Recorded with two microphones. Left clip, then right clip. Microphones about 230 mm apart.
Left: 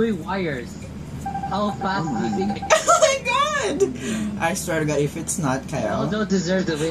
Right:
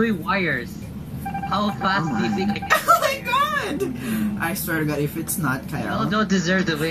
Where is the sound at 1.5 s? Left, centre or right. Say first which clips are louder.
Right 3 dB; right.